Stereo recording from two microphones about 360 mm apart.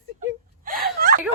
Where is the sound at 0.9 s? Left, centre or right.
Right.